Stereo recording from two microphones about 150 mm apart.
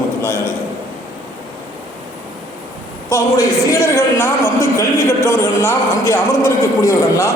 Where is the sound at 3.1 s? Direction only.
20° left (ahead or behind).